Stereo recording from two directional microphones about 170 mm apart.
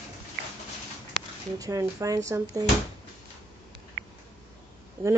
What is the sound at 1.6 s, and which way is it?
Speech, 20° right (ahead or behind).